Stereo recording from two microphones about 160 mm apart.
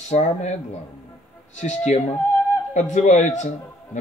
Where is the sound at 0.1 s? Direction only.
45° left (ahead or behind).